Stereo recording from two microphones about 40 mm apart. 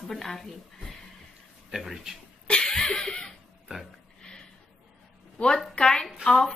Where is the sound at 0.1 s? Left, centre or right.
Centre.